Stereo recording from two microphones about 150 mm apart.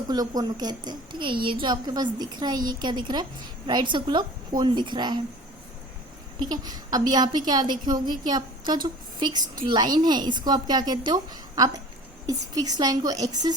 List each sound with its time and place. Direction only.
0.1 s a woman's voice: 25° right (ahead or behind)
6.4 s a woman's voice: 25° right (ahead or behind)